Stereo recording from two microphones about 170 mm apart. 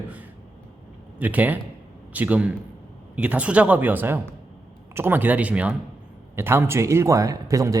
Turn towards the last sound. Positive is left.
turn(degrees=-20)  # may be behind; listen again after turning